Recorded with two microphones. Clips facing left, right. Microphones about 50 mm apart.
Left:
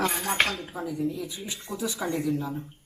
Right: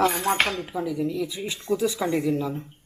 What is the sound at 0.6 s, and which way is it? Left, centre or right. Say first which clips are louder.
Speech: right 3 dB; right.